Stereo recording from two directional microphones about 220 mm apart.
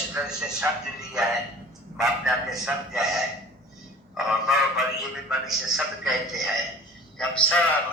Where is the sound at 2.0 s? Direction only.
Centre (ahead or behind).